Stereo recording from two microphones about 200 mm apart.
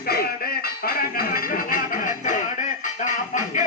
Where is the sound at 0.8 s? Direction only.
45° left (ahead or behind).